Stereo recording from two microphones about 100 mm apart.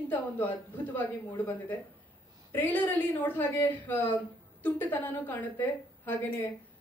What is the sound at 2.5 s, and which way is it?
Speech, 20° left (ahead or behind).